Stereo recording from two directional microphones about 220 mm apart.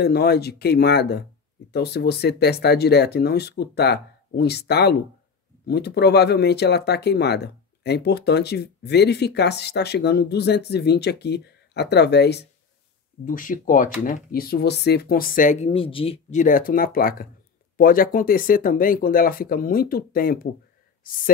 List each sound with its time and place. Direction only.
0.0 s speech: 45° left (ahead or behind)
13.2 s speech: 40° left (ahead or behind)